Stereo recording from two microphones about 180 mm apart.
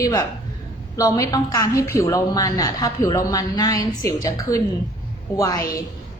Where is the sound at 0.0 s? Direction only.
20° left (ahead or behind).